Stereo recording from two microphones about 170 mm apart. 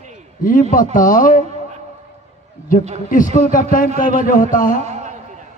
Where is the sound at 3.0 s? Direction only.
50° left (ahead or behind).